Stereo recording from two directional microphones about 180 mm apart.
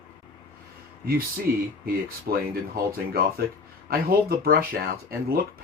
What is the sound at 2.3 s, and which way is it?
Speech, 50° right (ahead or behind).